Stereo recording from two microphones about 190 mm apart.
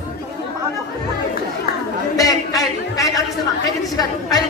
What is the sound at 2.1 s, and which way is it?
A woman's voice, 20° left (ahead or behind).